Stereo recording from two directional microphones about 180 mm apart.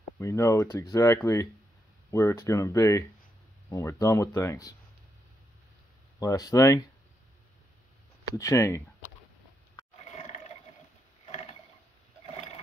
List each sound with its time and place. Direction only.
0.2 s speech: 15° left (ahead or behind)
6.1 s speech: 20° left (ahead or behind)
8.4 s speech: 15° left (ahead or behind)